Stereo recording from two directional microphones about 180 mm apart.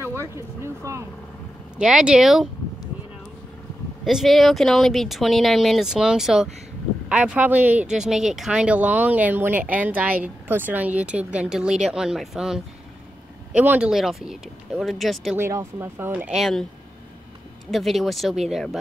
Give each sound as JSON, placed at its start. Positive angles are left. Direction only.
{"t": 0.6, "sound": "speech", "side_deg": -15}
{"t": 1.8, "sound": "speech", "side_deg": -5}
{"t": 4.0, "sound": "speech", "side_deg": 0}
{"t": 15.3, "sound": "speech", "side_deg": -15}
{"t": 17.6, "sound": "speech", "side_deg": 0}